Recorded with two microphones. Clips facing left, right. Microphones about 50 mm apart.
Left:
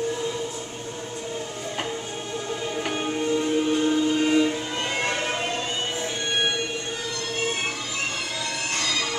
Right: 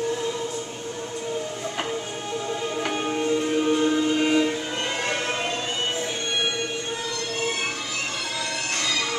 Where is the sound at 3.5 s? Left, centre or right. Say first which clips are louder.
Right 1 dB; centre.